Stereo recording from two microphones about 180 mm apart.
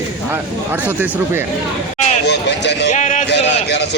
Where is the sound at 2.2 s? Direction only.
70° left (ahead or behind).